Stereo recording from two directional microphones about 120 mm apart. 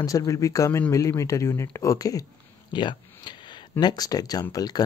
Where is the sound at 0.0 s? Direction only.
30° left (ahead or behind).